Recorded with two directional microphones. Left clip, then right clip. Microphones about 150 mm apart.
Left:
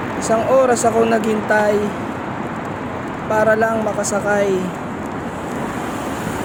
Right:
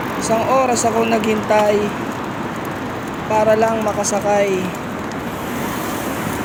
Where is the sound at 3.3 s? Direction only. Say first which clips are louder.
Right 1 dB; 35° left (ahead or behind).